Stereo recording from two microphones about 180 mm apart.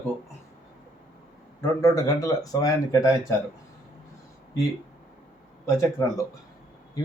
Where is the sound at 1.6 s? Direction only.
20° left (ahead or behind).